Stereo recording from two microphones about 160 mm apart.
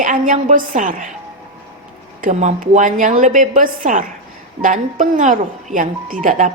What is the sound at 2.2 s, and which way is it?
Speech, 50° right (ahead or behind).